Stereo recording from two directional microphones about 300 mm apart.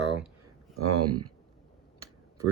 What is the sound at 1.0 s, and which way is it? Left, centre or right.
Speech, right.